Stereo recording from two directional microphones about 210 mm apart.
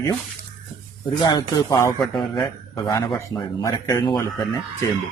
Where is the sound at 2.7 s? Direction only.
20° left (ahead or behind).